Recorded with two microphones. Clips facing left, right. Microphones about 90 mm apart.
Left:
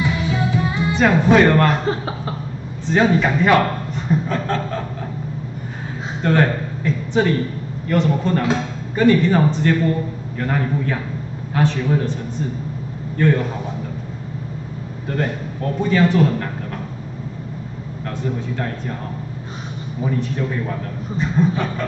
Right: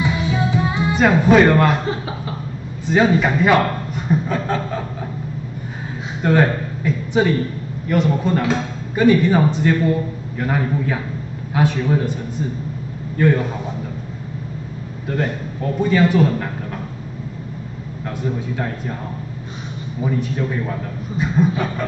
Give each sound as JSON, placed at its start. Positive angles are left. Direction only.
{"t": 0.0, "sound": "music", "side_deg": -20}
{"t": 0.9, "sound": "speech", "side_deg": -5}
{"t": 2.9, "sound": "a man's voice", "side_deg": -5}
{"t": 6.2, "sound": "a man's voice", "side_deg": -10}
{"t": 13.2, "sound": "speech", "side_deg": -10}
{"t": 15.0, "sound": "a man's voice", "side_deg": -5}
{"t": 18.0, "sound": "speech", "side_deg": -10}
{"t": 20.0, "sound": "a man's voice", "side_deg": -5}